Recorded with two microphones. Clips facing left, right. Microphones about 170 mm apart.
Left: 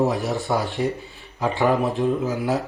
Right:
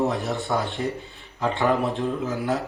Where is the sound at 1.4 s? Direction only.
Centre (ahead or behind).